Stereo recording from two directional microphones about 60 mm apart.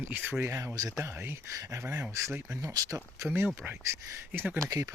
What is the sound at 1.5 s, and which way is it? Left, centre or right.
Speech, right.